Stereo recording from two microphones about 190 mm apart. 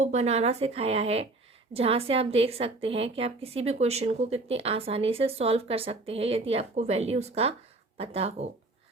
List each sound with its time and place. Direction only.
0.0 s a woman's voice: 35° right (ahead or behind)